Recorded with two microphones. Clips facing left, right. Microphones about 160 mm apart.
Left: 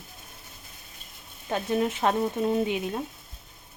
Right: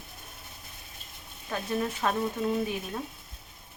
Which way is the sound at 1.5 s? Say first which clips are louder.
Left 5 dB; 25° left (ahead or behind).